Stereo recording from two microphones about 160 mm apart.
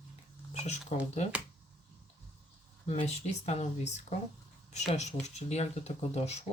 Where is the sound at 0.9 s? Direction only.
45° left (ahead or behind).